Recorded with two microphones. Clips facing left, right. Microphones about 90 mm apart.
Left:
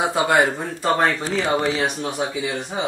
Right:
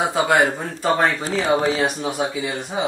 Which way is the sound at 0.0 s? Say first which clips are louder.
Even; centre (ahead or behind).